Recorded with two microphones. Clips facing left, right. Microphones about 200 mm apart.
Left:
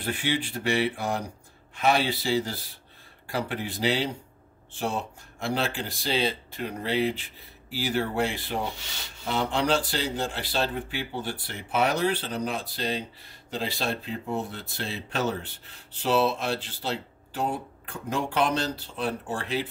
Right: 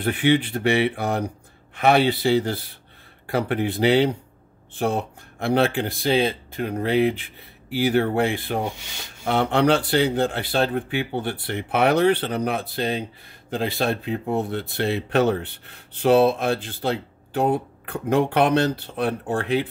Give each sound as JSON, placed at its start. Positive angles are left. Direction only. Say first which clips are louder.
{"t": 0.0, "sound": "speech", "louder": "right 9 dB", "side_deg": -60}